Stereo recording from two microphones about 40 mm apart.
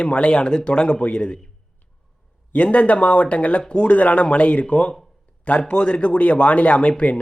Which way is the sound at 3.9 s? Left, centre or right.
Left.